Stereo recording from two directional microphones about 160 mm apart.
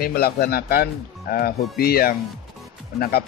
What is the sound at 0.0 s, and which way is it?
Speech, 75° left (ahead or behind).